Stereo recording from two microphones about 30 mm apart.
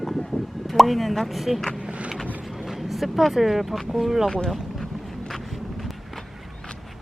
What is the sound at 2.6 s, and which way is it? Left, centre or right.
Speech, centre.